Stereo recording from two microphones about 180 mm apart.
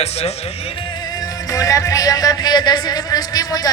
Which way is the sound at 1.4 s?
20° left (ahead or behind).